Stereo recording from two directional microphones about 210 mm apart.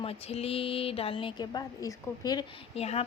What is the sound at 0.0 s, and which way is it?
A woman's voice, 30° left (ahead or behind).